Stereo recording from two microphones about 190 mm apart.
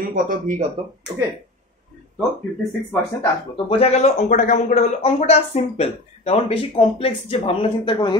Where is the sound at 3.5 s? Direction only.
30° left (ahead or behind).